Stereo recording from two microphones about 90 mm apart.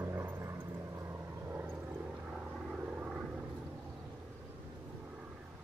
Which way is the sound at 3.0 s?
10° right (ahead or behind).